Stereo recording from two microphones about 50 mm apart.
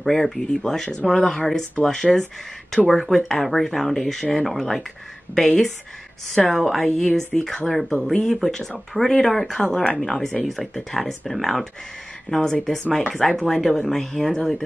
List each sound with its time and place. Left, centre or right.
0.0 s speech: centre